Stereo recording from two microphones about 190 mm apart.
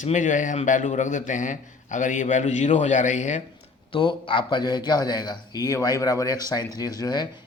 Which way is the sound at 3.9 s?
25° left (ahead or behind).